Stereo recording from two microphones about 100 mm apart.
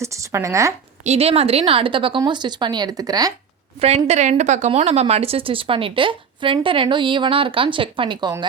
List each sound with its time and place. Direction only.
0.0 s a sound: 30° right (ahead or behind)
1.0 s a woman's voice: 90° right; by 3.3 s 40° right (ahead or behind)
3.8 s a woman's voice: 90° right; by 8.3 s 60° right (ahead or behind)